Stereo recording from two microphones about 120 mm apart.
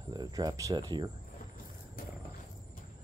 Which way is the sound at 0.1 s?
30° right (ahead or behind).